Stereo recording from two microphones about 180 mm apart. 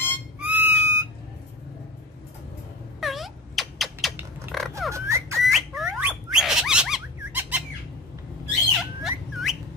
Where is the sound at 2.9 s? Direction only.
Centre (ahead or behind).